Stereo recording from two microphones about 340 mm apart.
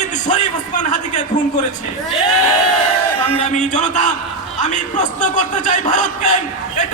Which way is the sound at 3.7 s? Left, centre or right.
Left.